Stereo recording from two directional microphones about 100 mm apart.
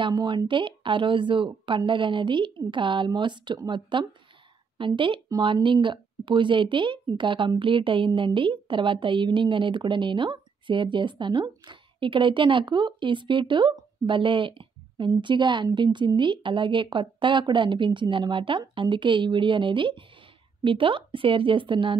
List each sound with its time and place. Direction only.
0.0 s speech: 50° right (ahead or behind)